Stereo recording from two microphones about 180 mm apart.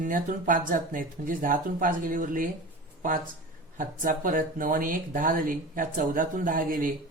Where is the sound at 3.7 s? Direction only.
45° right (ahead or behind).